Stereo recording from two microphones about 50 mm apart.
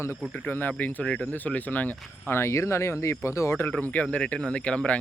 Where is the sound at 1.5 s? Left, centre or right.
Left.